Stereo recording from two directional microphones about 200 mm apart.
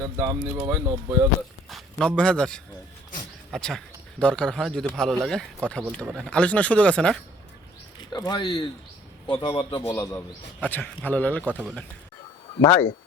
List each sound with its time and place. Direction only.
0.0 s speech: 15° right (ahead or behind)
1.7 s a man's voice: centre (ahead or behind)
8.1 s a man's voice: 20° left (ahead or behind)
9.9 s a man's voice: 10° left (ahead or behind)